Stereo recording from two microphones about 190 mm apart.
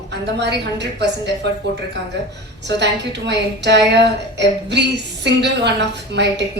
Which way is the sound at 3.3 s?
65° right (ahead or behind).